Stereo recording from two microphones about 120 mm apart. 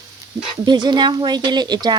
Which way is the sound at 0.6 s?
40° right (ahead or behind).